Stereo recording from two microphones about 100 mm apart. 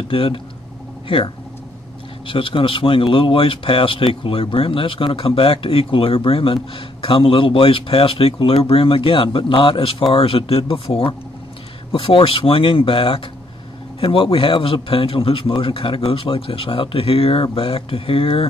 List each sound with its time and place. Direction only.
0.1 s speech: 65° left (ahead or behind)